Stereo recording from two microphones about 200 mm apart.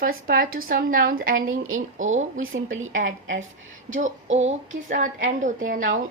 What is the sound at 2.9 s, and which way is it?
Speech, 40° right (ahead or behind).